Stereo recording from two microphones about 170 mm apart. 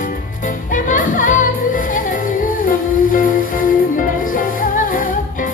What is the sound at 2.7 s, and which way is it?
Humming, 55° left (ahead or behind).